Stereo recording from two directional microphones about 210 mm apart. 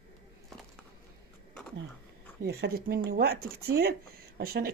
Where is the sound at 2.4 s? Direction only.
50° right (ahead or behind).